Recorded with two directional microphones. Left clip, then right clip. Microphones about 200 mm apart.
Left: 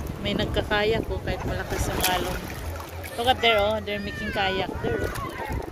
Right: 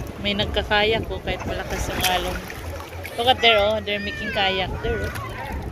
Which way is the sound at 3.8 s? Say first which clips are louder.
Right 4 dB; 55° left (ahead or behind).